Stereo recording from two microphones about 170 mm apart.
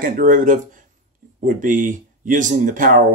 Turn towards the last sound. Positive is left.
turn(degrees=-50)  # may be behind; listen again after turning